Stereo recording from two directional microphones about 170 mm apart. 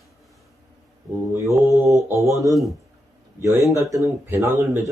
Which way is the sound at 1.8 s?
20° right (ahead or behind).